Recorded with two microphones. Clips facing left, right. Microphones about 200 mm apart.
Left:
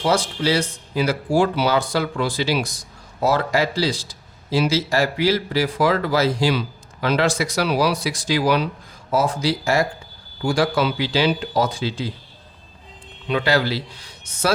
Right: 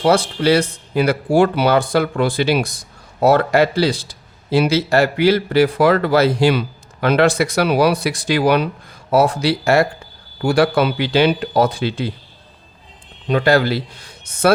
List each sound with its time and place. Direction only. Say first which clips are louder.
0.0 s speech: right 5 dB; 60° right (ahead or behind)
13.2 s a man's voice: right 5 dB; 45° right (ahead or behind)